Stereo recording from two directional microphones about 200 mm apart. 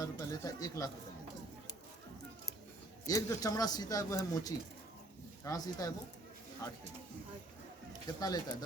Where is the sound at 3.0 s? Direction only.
15° left (ahead or behind).